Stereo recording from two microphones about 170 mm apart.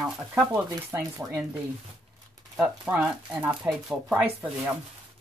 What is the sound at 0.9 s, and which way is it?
Speech, 15° right (ahead or behind).